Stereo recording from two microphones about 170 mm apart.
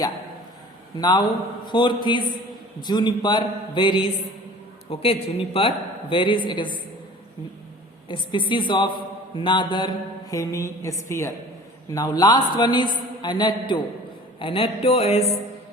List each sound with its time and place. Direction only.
0.9 s a man's voice: 25° left (ahead or behind)
8.0 s a man's voice: 30° left (ahead or behind)